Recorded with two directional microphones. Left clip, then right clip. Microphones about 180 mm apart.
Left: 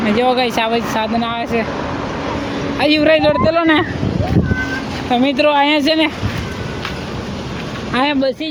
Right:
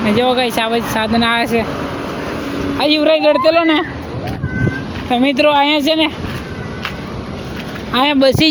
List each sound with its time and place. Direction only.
0.0 s speech: 10° right (ahead or behind)
1.2 s speech: 35° right (ahead or behind)
2.7 s speech: centre (ahead or behind)
3.3 s speech: 20° right (ahead or behind)
5.1 s speech: 10° right (ahead or behind)
7.9 s speech: 5° right (ahead or behind)
8.2 s speech: 25° right (ahead or behind)